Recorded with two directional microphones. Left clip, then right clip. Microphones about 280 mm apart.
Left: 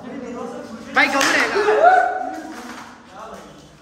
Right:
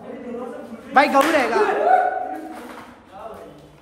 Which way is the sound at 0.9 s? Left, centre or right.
Centre.